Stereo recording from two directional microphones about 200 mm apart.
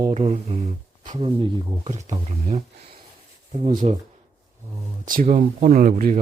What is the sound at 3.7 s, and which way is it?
Speech, 40° right (ahead or behind).